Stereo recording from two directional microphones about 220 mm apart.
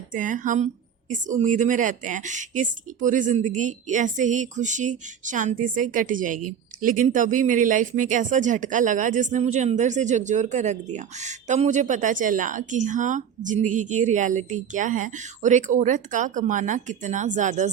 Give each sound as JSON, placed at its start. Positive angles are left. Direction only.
{"t": 0.1, "sound": "speech", "side_deg": -35}